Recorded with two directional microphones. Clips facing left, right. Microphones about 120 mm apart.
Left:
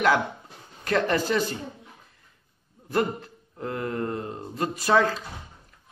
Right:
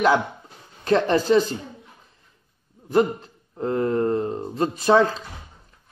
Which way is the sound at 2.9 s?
20° right (ahead or behind).